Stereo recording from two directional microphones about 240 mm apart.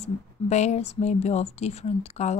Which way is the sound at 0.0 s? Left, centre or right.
Left.